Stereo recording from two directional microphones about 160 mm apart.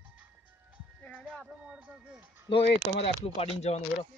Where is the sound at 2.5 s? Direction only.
35° left (ahead or behind).